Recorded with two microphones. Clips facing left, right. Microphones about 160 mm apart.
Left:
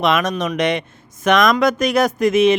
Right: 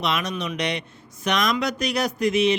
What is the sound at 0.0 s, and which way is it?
Speech, 50° left (ahead or behind).